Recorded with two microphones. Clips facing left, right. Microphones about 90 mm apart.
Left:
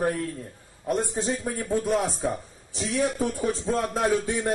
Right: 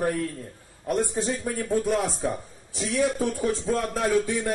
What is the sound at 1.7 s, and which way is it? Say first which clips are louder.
Speech: even; 5° left (ahead or behind).